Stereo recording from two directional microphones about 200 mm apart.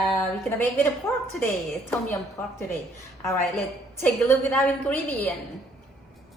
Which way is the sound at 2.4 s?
10° left (ahead or behind).